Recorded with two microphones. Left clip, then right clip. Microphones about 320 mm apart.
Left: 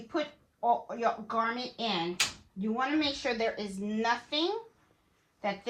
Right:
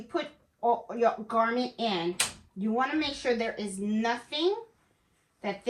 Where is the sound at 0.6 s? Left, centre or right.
Centre.